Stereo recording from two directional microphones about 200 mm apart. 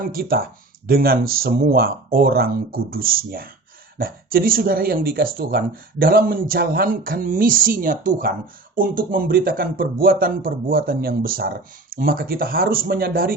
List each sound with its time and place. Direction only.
0.1 s a man's voice: 50° right (ahead or behind)